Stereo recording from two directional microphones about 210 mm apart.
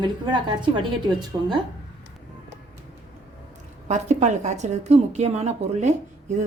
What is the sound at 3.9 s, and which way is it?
Speech, 35° right (ahead or behind).